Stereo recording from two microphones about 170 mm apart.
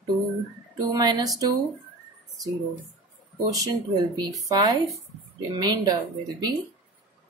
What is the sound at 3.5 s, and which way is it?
Speech, 20° right (ahead or behind).